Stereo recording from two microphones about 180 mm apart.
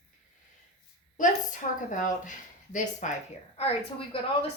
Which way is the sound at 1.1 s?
45° left (ahead or behind).